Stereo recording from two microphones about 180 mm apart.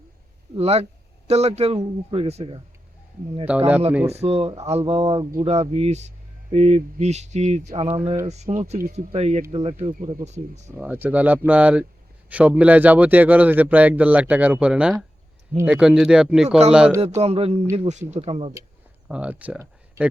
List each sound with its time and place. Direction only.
0.5 s speech: 35° right (ahead or behind)
3.5 s a man's voice: 10° right (ahead or behind)
4.0 s speech: 35° right (ahead or behind)
9.9 s speech: 45° right (ahead or behind)
10.8 s a man's voice: 10° right (ahead or behind)
17.0 s speech: 35° right (ahead or behind)
19.0 s speech: 5° right (ahead or behind)